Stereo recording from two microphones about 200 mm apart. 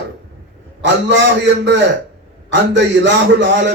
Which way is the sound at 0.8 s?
65° right (ahead or behind).